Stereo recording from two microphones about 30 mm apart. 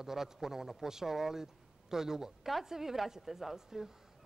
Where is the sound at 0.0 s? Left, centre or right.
Centre.